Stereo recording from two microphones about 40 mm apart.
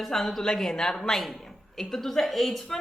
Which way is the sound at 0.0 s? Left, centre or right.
Centre.